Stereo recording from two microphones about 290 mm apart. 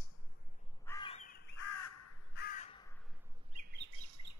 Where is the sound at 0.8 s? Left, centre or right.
Centre.